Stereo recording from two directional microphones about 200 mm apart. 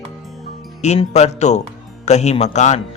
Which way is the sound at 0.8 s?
35° left (ahead or behind).